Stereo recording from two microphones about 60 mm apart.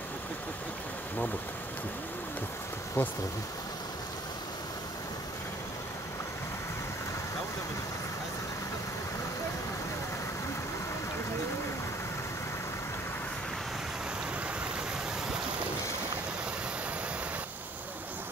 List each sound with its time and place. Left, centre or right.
3.0 s speech: left